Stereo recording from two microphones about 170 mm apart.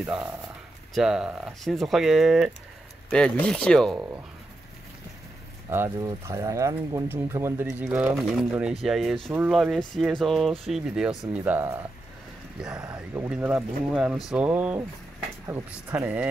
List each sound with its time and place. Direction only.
0.9 s speech: 5° right (ahead or behind)
5.7 s speech: 15° right (ahead or behind)